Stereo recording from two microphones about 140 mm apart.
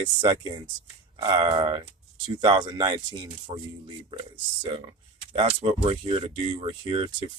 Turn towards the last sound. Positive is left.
turn(degrees=-40)  # may be behind; listen again after turning